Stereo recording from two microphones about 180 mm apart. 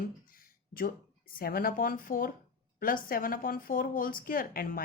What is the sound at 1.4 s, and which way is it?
A woman's voice, 55° left (ahead or behind).